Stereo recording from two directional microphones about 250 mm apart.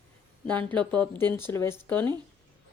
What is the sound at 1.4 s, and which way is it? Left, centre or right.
Speech, centre.